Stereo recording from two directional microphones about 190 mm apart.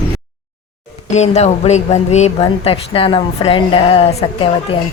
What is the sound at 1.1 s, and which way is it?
Speech, 35° left (ahead or behind).